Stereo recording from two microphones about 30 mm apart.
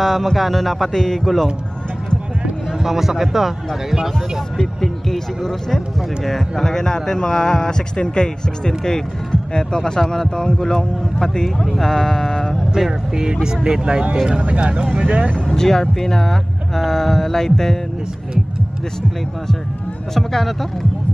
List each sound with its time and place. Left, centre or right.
0.0 s speech: centre
0.9 s speech: centre
1.2 s speech: centre
2.8 s speech: centre
4.8 s speech: centre
13.1 s speech: right
15.4 s speech: centre
20.2 s speech: centre